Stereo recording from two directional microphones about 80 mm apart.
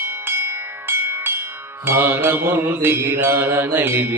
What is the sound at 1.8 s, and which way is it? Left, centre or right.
Music, right.